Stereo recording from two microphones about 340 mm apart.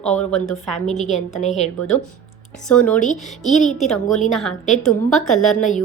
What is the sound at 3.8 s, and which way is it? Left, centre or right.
A woman's voice, centre.